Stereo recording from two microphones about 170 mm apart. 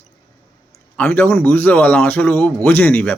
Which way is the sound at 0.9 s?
10° left (ahead or behind).